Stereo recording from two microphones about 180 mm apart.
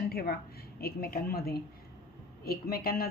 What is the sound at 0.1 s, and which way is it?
A woman's voice, 60° left (ahead or behind).